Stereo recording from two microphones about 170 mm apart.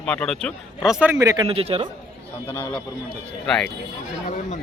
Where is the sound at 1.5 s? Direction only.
35° right (ahead or behind).